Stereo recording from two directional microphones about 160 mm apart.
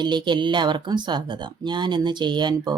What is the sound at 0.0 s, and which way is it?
Speech, 30° right (ahead or behind).